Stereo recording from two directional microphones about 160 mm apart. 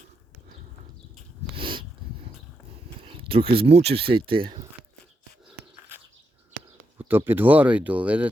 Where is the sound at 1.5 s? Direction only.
30° right (ahead or behind).